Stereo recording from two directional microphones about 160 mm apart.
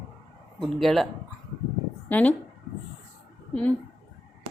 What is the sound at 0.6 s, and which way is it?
Speech, centre (ahead or behind).